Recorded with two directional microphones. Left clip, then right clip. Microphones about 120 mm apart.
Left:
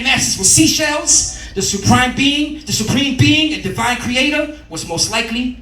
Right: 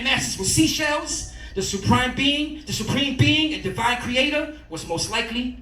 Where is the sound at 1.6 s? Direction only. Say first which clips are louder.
Left 7 dB; 50° left (ahead or behind).